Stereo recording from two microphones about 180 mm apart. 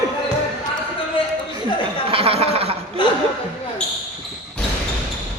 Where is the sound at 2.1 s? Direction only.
35° right (ahead or behind).